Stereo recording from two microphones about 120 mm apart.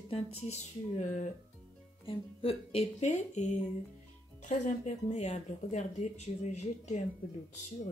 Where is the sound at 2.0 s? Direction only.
50° left (ahead or behind); by 3.6 s 75° left (ahead or behind).